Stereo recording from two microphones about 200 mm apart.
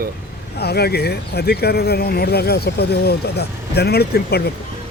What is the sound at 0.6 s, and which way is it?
Speech, 55° left (ahead or behind).